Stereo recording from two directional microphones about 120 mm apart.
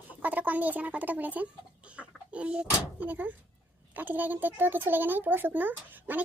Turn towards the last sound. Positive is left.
turn(degrees=-15)  # may be behind; listen again after turning